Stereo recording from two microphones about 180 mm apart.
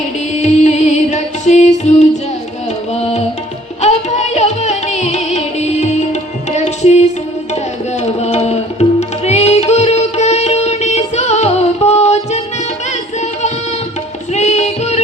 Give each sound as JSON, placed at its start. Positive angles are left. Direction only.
{"t": 0.6, "sound": "music", "side_deg": 40}
{"t": 2.9, "sound": "tabla", "side_deg": 35}
{"t": 3.8, "sound": "music", "side_deg": 40}
{"t": 14.3, "sound": "music", "side_deg": 40}